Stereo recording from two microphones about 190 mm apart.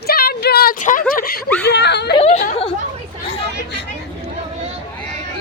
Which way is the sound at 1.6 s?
60° left (ahead or behind).